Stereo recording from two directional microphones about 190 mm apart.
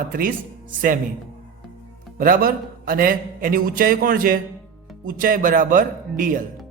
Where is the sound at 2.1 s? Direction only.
45° right (ahead or behind).